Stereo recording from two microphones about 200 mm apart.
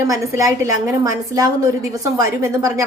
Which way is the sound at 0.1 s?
15° right (ahead or behind).